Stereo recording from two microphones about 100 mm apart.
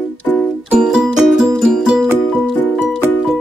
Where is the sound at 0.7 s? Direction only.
10° right (ahead or behind).